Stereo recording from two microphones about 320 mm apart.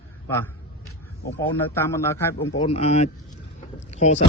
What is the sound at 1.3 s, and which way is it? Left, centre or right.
A man's voice, centre.